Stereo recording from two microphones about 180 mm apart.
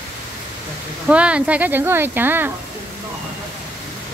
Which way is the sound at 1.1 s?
5° right (ahead or behind).